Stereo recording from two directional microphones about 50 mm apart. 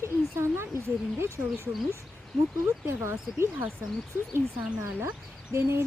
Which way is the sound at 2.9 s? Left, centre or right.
Right.